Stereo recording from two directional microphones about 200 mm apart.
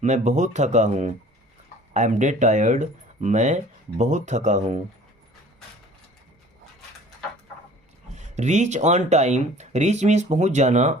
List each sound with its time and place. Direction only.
0.0 s speech: 35° right (ahead or behind)
8.1 s speech: 35° right (ahead or behind)